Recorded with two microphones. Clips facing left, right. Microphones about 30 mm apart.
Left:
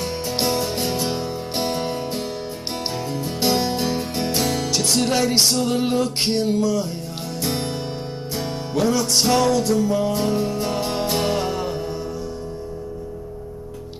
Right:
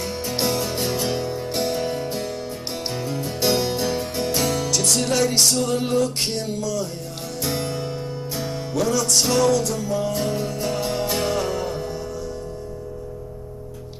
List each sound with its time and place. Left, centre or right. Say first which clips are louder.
0.2 s music: left 1 dB; centre
1.6 s music: even; left
2.9 s music: right 1 dB; centre
3.5 s music: left 1 dB; centre
4.9 s music: left 2 dB; centre